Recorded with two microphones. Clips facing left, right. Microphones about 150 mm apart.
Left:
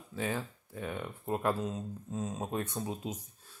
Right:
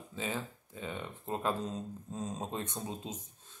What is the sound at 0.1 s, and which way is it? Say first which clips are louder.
Speech: left 3 dB; 15° right (ahead or behind).